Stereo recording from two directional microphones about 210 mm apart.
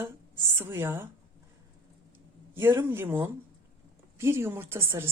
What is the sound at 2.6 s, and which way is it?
A woman's voice, 10° right (ahead or behind).